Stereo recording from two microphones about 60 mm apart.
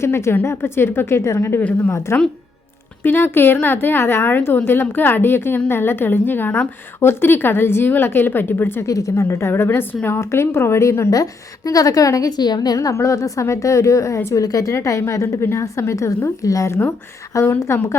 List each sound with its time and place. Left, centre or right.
0.0 s a woman's voice: left
8.8 s a woman's voice: left
9.2 s a woman's voice: left
10.2 s a woman's voice: left
11.1 s a woman's voice: left
17.3 s a woman's voice: left
17.7 s a woman's voice: left